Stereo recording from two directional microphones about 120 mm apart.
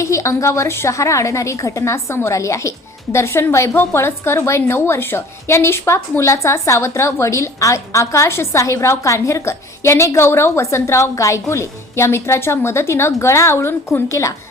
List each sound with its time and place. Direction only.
0.0 s a woman's voice: 25° left (ahead or behind)